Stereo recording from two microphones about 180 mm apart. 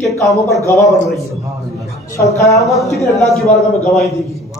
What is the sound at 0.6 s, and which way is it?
Speech, 15° left (ahead or behind).